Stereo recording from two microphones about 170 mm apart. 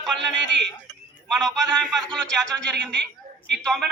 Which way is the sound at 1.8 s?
Centre (ahead or behind).